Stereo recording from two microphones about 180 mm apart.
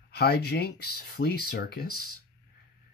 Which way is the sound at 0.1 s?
65° left (ahead or behind).